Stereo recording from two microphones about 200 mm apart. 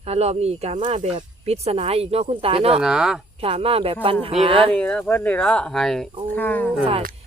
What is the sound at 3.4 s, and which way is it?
Speech, 30° right (ahead or behind).